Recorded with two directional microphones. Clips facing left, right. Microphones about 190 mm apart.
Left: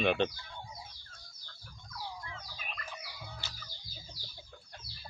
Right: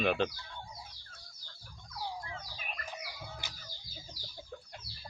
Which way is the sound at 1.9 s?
30° right (ahead or behind).